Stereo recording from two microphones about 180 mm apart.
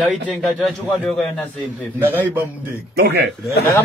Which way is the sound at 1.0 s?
5° left (ahead or behind).